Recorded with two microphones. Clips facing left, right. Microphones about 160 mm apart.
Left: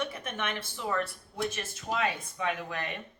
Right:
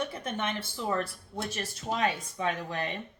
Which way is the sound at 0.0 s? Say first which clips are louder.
Right 2 dB; 35° right (ahead or behind).